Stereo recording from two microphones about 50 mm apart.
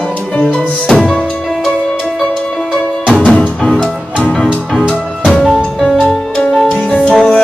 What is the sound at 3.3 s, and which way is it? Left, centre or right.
Music, centre.